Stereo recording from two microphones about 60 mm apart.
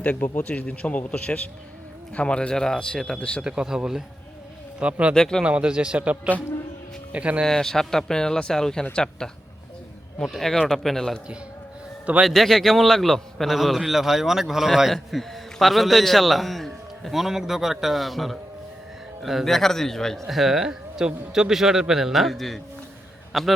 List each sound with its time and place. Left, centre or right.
0.0 s speech: left
3.4 s a man's voice: centre
4.8 s a man's voice: right
5.1 s speech: centre
5.4 s a man's voice: centre
7.4 s a man's voice: centre
12.2 s a man's voice: centre
20.2 s a man's voice: centre